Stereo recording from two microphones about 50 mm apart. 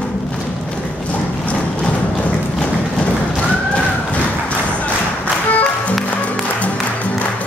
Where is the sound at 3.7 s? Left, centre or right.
Left.